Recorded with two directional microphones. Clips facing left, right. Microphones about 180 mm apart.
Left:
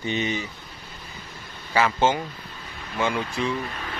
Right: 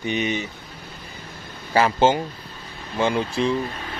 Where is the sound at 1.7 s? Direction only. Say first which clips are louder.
Right 3 dB; 30° right (ahead or behind).